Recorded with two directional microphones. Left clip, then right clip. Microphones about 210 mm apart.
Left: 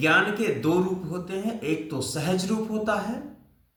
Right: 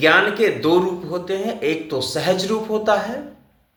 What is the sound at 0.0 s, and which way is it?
A man's voice, 25° left (ahead or behind).